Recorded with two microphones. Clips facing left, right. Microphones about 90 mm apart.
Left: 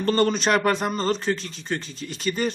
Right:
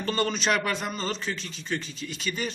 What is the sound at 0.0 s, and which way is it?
A man's voice, 40° left (ahead or behind).